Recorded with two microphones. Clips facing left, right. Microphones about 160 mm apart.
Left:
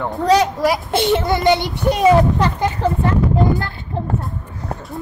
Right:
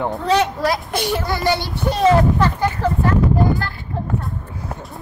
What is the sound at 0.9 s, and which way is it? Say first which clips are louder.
A child's voice: left 5 dB; 25° left (ahead or behind).